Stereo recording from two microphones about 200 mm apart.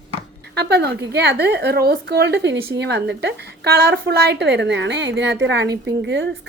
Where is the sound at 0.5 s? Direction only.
55° right (ahead or behind).